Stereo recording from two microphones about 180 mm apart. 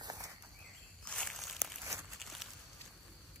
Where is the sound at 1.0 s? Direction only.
5° left (ahead or behind).